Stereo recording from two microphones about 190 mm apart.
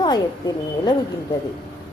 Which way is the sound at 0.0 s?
20° left (ahead or behind).